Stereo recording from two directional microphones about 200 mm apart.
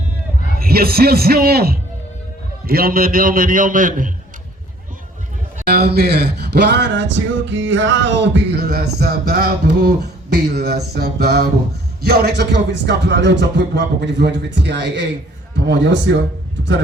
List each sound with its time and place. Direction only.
0.6 s a man's voice: 50° right (ahead or behind)
5.5 s speech: 50° right (ahead or behind)